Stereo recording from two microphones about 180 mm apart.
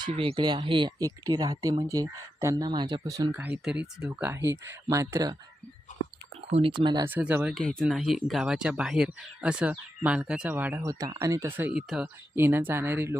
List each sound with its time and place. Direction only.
0.0 s speech: 30° right (ahead or behind)
6.5 s speech: 30° right (ahead or behind)
7.1 s speech: 10° right (ahead or behind)